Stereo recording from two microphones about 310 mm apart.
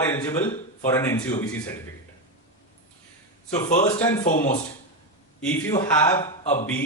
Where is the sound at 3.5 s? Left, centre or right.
Left.